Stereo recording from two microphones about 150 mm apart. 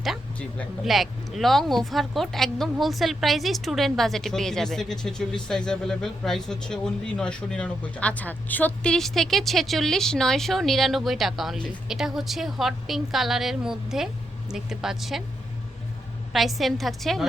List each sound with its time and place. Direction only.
0.0 s speech: centre (ahead or behind)
16.3 s speech: centre (ahead or behind)